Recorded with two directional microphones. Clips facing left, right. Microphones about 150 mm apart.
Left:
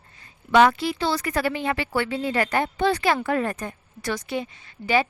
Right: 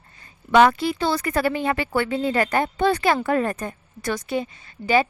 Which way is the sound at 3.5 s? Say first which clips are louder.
Right 2 dB; 50° right (ahead or behind).